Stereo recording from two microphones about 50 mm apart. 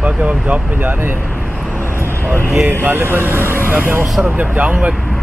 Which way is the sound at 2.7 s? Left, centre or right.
Right.